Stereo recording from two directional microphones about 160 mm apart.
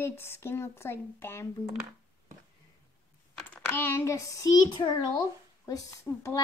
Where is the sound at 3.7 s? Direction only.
15° left (ahead or behind).